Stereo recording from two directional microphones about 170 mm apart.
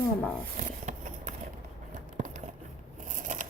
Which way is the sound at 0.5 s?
45° right (ahead or behind).